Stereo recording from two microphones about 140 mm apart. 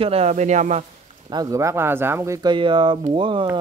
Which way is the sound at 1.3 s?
20° right (ahead or behind).